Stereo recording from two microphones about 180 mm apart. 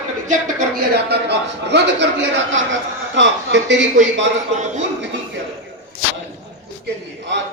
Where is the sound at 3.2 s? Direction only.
85° right.